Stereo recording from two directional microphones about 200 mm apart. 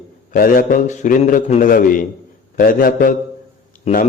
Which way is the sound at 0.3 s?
45° left (ahead or behind).